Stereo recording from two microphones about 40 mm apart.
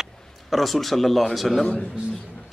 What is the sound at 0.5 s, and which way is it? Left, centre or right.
Speech, centre.